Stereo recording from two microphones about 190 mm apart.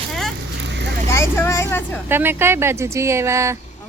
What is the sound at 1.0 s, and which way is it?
Speech, 15° left (ahead or behind).